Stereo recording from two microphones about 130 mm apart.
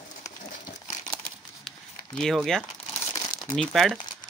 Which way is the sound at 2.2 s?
5° left (ahead or behind).